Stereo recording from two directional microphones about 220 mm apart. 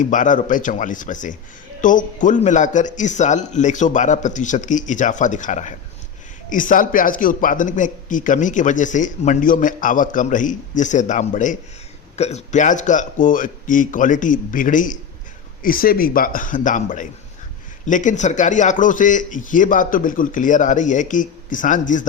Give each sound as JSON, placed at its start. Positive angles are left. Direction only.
{"t": 0.0, "sound": "a man's voice", "side_deg": 35}